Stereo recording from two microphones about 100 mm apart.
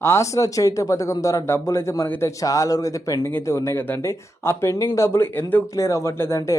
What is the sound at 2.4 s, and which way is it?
A man's voice, 35° left (ahead or behind).